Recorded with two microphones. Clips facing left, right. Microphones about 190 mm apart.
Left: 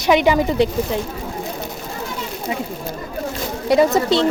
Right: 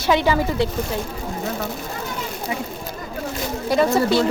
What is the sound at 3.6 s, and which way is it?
Speech, 20° left (ahead or behind).